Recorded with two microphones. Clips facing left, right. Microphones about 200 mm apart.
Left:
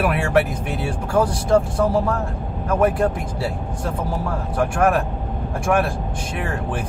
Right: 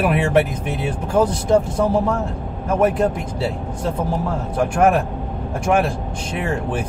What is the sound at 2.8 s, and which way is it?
Speech, 20° right (ahead or behind).